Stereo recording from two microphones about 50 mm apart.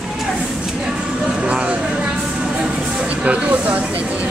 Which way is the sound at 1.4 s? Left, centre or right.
Right.